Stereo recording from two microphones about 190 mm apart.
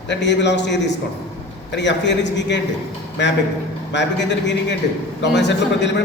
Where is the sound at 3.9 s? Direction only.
65° left (ahead or behind).